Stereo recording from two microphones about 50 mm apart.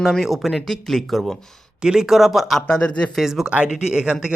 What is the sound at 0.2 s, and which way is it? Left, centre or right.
Speech, centre.